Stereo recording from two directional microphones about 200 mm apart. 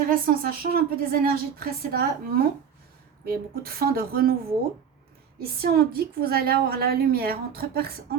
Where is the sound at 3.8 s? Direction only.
50° right (ahead or behind).